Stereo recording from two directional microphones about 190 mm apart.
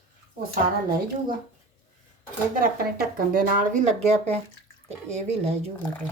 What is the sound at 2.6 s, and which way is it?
A woman's voice, 50° right (ahead or behind).